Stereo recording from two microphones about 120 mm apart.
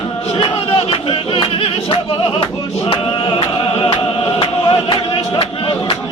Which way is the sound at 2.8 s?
50° left (ahead or behind).